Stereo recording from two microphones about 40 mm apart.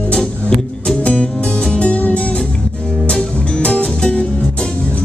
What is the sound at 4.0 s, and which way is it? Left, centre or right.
Music, left.